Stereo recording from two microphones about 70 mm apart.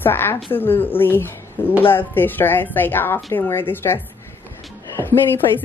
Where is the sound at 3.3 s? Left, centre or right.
Left.